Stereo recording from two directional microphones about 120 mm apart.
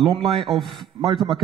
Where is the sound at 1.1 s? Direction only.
40° right (ahead or behind).